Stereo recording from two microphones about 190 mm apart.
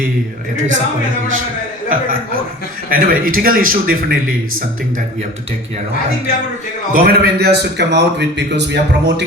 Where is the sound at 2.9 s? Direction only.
50° right (ahead or behind).